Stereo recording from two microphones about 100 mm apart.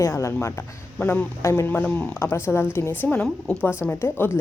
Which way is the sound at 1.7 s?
15° left (ahead or behind).